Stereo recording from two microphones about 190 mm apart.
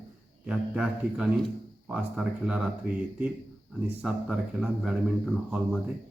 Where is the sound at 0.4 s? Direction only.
5° right (ahead or behind).